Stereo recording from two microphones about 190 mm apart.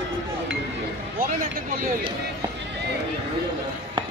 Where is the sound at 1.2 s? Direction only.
50° right (ahead or behind).